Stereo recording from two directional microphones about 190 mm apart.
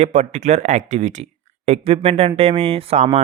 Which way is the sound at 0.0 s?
35° right (ahead or behind).